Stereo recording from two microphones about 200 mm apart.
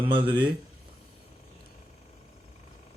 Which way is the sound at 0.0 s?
25° right (ahead or behind).